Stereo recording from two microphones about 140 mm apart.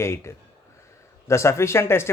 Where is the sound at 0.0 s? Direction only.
20° left (ahead or behind).